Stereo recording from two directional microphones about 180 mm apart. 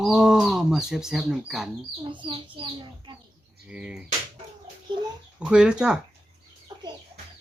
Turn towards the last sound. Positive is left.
turn(degrees=-5)  # may be behind; listen again after turning